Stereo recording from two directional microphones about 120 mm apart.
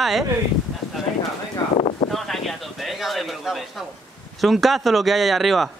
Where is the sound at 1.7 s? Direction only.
70° left (ahead or behind).